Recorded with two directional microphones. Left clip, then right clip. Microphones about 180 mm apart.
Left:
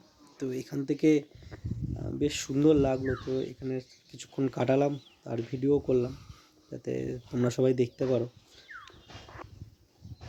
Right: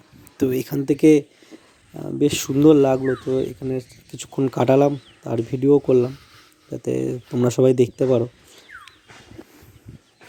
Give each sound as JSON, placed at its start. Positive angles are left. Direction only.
{"t": 0.3, "sound": "speech", "side_deg": -50}